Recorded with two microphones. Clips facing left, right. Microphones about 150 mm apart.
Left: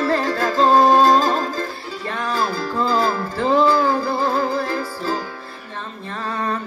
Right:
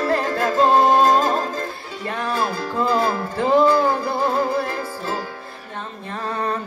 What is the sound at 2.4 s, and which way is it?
Music, 20° right (ahead or behind).